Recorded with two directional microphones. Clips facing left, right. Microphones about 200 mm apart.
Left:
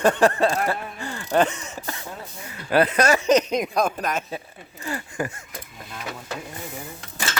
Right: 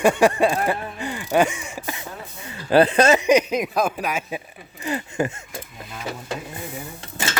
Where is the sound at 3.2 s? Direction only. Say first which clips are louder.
Right 1 dB; 10° right (ahead or behind); by 5.5 s 25° right (ahead or behind).